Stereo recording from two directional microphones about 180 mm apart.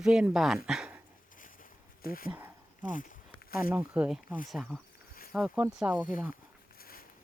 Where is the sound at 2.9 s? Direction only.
45° left (ahead or behind).